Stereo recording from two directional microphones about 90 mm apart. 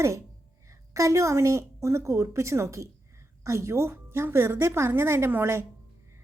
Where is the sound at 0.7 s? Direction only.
35° right (ahead or behind).